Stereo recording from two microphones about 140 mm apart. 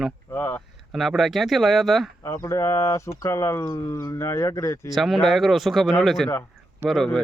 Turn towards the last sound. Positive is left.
turn(degrees=0)  # may be behind; listen again after turning